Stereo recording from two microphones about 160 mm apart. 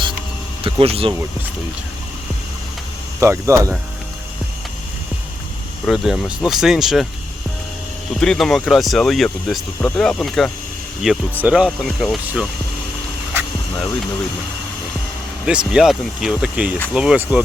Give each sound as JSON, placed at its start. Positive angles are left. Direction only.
{"t": 0.6, "sound": "speech", "side_deg": -35}
{"t": 3.2, "sound": "speech", "side_deg": -15}
{"t": 5.8, "sound": "speech", "side_deg": -5}
{"t": 8.2, "sound": "speech", "side_deg": 5}
{"t": 15.4, "sound": "speech", "side_deg": -5}